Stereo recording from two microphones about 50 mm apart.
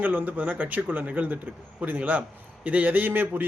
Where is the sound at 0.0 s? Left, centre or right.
Right.